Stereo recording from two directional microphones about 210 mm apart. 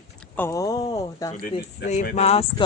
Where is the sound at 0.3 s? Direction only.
15° left (ahead or behind).